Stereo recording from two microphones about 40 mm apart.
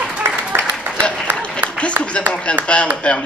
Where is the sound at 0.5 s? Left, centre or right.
Right.